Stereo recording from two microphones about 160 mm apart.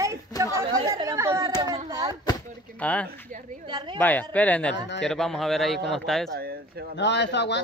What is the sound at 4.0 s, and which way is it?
A man's voice, 10° left (ahead or behind).